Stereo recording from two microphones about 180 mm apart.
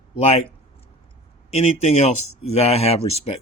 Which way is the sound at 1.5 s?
35° left (ahead or behind).